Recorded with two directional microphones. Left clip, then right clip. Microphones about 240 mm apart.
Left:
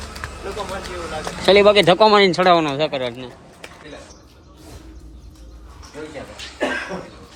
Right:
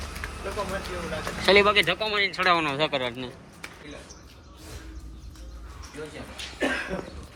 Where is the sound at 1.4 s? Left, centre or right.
Centre.